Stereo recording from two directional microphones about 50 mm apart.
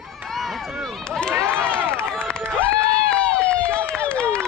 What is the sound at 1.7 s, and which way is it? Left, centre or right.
Run, left.